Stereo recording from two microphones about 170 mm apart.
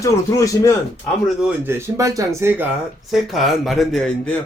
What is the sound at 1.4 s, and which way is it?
Speech, 15° right (ahead or behind).